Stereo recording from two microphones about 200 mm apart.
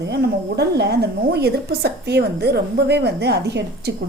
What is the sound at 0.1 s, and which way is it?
A woman's voice, 55° right (ahead or behind).